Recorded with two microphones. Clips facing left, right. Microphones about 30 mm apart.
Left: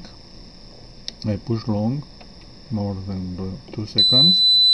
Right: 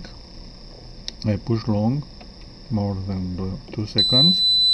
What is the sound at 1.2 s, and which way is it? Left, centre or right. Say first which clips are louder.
Speech: right 1 dB; centre.